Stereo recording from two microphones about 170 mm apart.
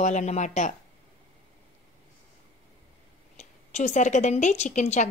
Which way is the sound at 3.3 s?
45° left (ahead or behind).